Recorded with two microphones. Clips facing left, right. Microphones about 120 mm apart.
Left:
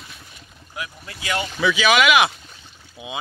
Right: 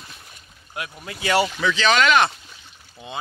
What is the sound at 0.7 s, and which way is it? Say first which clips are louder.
Speech: right 1 dB; 80° right.